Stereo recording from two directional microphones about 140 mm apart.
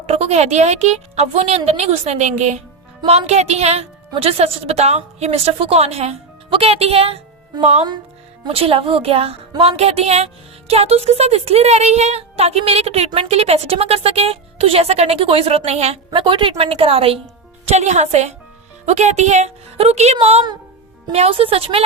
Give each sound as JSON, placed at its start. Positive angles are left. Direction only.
{"t": 0.0, "sound": "a woman's voice", "side_deg": -50}
{"t": 16.2, "sound": "a woman's voice", "side_deg": -35}